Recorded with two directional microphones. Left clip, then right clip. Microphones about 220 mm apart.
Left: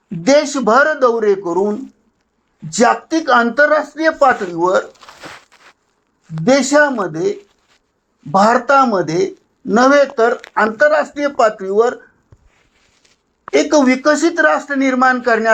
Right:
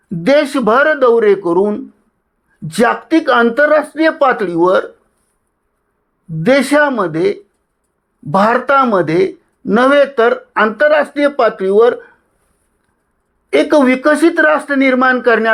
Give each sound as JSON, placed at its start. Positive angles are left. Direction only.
{"t": 0.3, "sound": "a man's voice", "side_deg": -40}
{"t": 6.4, "sound": "a man's voice", "side_deg": -40}
{"t": 13.5, "sound": "speech", "side_deg": -45}